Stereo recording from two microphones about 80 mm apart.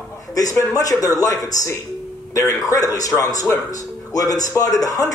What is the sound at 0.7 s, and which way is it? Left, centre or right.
Speech, left.